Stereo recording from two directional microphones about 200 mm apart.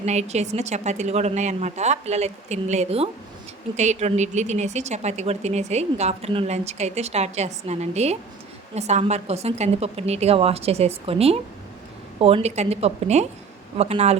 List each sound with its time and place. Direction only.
0.0 s speech: 35° right (ahead or behind)